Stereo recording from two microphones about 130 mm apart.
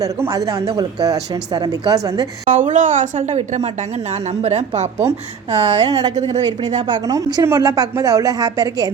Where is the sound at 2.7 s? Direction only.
75° right (ahead or behind).